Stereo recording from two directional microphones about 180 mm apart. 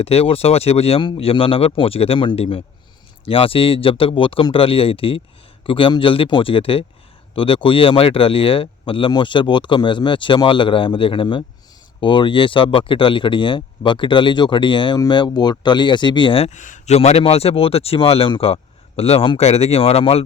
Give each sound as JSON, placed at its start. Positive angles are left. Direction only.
{"t": 0.0, "sound": "speech", "side_deg": 35}